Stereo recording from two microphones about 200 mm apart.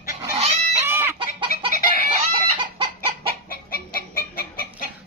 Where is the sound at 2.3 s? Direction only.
25° right (ahead or behind).